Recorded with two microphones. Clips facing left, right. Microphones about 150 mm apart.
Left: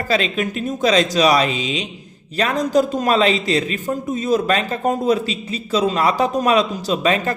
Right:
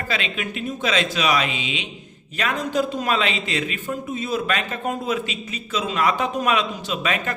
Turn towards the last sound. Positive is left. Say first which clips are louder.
# left 6 dB
turn(degrees=35)  # may be behind; listen again after turning